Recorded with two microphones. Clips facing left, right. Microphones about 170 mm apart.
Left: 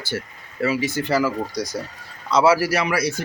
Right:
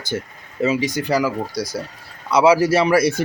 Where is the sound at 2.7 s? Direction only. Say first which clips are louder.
Right 6 dB; 30° right (ahead or behind).